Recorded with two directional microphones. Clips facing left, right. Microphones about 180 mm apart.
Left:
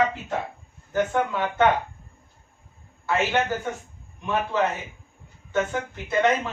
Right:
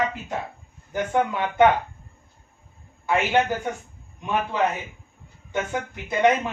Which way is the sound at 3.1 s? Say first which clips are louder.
Right 1 dB; 15° right (ahead or behind).